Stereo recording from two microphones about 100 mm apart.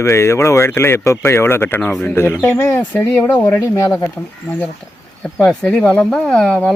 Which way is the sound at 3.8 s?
30° left (ahead or behind).